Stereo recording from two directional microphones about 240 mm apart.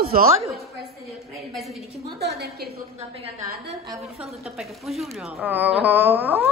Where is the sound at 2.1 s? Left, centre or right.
Right.